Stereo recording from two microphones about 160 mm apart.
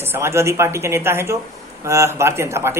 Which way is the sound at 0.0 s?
15° right (ahead or behind).